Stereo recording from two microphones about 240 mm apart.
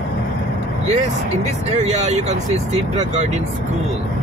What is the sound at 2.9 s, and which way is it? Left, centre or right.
Speech, right.